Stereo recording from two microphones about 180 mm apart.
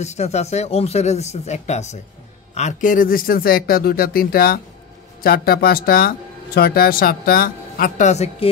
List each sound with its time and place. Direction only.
0.0 s speech: 40° left (ahead or behind)